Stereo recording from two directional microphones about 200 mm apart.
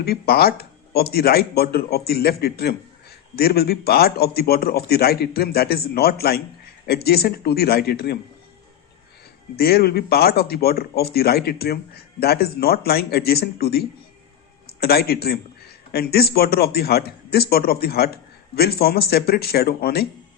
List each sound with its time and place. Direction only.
0.0 s speech: 50° left (ahead or behind)
9.6 s speech: 50° left (ahead or behind)